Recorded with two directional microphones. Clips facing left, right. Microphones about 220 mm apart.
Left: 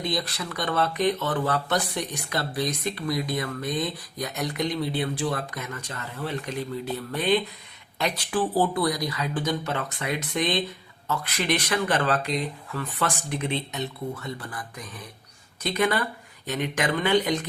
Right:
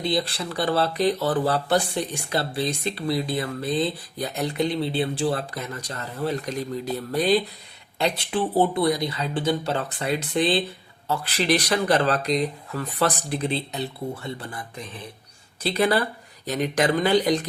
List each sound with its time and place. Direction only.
0.0 s speech: 30° right (ahead or behind)